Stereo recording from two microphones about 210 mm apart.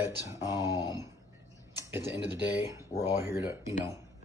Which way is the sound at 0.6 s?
20° left (ahead or behind).